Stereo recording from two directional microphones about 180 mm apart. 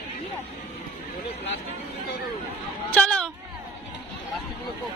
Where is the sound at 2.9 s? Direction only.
5° left (ahead or behind).